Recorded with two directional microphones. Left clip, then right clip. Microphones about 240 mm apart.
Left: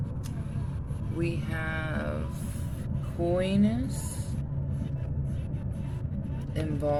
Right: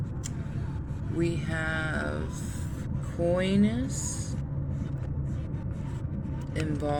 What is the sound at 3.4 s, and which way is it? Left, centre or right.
Speech, right.